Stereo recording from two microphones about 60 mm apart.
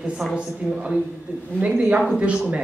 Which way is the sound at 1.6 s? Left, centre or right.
Centre.